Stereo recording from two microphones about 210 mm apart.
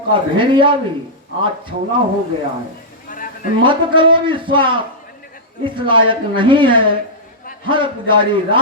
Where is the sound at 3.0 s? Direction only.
40° left (ahead or behind).